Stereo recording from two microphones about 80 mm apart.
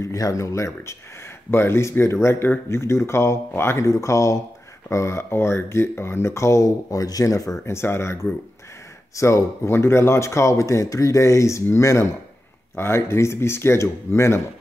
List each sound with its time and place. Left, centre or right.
0.0 s speech: left